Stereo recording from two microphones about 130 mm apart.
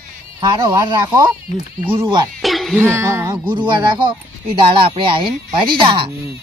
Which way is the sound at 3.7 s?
35° right (ahead or behind).